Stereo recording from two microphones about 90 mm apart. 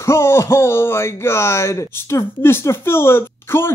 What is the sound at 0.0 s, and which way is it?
Speech, 30° left (ahead or behind).